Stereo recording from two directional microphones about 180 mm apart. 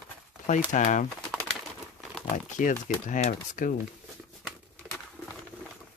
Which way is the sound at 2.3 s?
45° left (ahead or behind).